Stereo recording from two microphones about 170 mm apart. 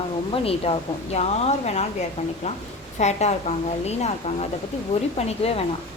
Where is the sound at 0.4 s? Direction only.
35° left (ahead or behind).